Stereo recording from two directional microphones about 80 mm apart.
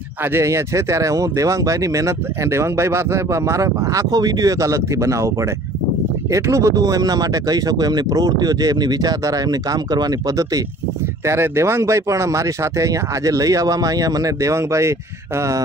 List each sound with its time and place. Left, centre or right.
0.2 s speech: right
6.3 s speech: right
11.2 s speech: right